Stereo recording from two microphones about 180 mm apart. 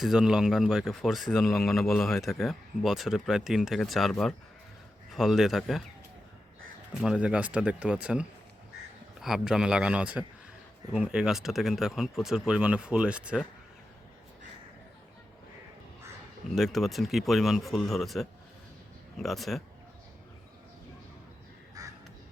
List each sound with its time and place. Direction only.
0.0 s speech: 5° right (ahead or behind)
6.9 s speech: 5° right (ahead or behind)
16.5 s speech: centre (ahead or behind)
21.8 s crow: 20° right (ahead or behind)